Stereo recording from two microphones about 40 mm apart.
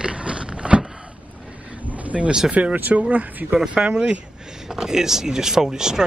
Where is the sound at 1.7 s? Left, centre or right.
Right.